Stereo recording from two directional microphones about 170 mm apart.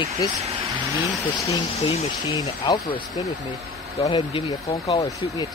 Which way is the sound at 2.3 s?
25° left (ahead or behind).